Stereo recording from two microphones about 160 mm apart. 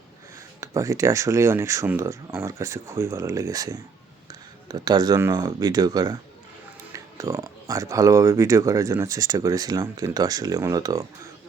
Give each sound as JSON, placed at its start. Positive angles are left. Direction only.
{"t": 0.6, "sound": "speech", "side_deg": -20}